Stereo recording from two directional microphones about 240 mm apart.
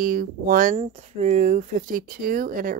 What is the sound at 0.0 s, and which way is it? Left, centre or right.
Speech, right.